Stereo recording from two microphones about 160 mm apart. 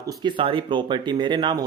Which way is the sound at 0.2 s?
30° right (ahead or behind).